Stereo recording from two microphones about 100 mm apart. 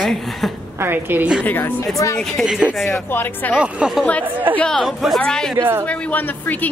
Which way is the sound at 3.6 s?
5° right (ahead or behind).